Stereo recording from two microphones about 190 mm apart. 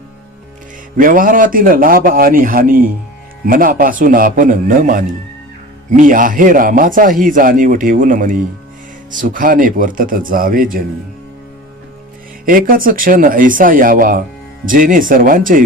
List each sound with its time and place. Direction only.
0.9 s speech: 45° right (ahead or behind)
12.5 s speech: 45° right (ahead or behind)